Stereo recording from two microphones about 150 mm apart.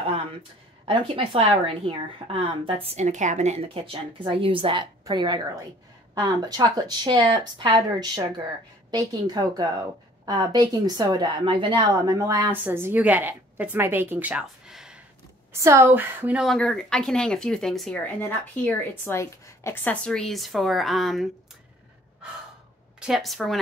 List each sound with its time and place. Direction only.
0.8 s a woman's voice: 35° right (ahead or behind); by 15.0 s 5° right (ahead or behind)
15.5 s a woman's voice: 20° right (ahead or behind)
16.4 s speech: 5° left (ahead or behind)
22.9 s speech: 5° right (ahead or behind)